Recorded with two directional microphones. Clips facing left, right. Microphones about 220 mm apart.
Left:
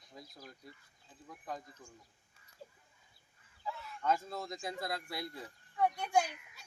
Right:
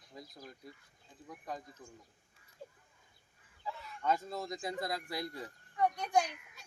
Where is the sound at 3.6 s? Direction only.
Centre (ahead or behind).